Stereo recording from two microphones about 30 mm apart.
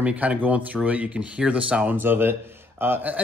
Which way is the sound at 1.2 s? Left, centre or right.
Right.